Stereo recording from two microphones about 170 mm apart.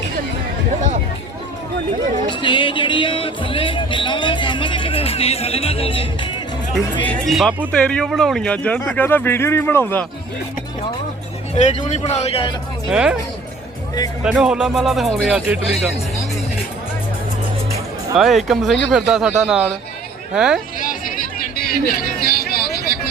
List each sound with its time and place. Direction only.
2.3 s music: 30° left (ahead or behind)
7.0 s speech: 5° left (ahead or behind)
11.5 s a man's voice: 40° left (ahead or behind)
12.9 s speech: 5° right (ahead or behind)
14.3 s speech: 5° right (ahead or behind)
18.2 s speech: centre (ahead or behind)
20.7 s a sound: 55° left (ahead or behind)